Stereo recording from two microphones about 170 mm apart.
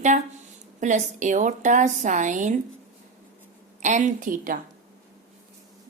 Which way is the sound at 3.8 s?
45° right (ahead or behind).